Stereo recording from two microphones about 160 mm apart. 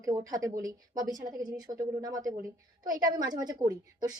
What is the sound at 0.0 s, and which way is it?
A woman's voice, 20° right (ahead or behind).